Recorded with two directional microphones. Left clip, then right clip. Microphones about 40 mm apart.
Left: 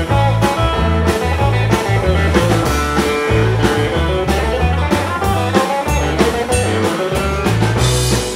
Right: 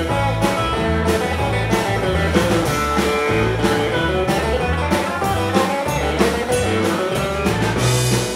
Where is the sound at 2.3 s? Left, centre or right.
Left.